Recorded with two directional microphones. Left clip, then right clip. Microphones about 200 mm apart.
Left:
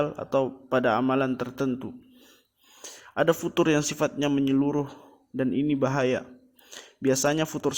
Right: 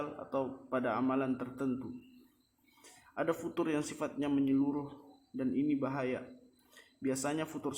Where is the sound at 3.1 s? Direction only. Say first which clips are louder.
Left 11 dB; 45° left (ahead or behind).